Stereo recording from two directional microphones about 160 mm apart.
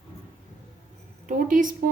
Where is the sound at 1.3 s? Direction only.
55° right (ahead or behind).